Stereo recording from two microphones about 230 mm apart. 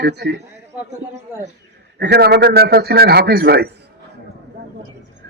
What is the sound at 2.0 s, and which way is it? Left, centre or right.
Speech, right.